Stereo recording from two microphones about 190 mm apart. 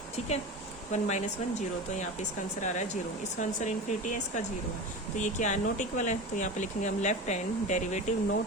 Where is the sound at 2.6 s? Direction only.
40° left (ahead or behind).